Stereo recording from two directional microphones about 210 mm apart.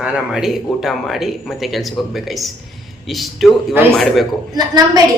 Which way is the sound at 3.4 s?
10° right (ahead or behind).